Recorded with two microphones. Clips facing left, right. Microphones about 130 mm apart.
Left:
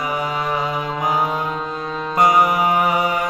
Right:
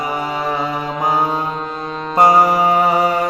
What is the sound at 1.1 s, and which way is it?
Music, 30° right (ahead or behind).